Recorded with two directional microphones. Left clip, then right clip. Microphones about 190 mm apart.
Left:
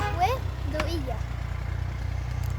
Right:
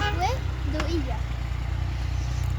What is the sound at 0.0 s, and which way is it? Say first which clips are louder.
Vehicle: left 1 dB; 50° left (ahead or behind).